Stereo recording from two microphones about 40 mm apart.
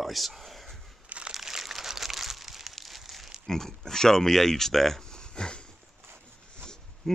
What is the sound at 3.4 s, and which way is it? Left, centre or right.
Speech, centre.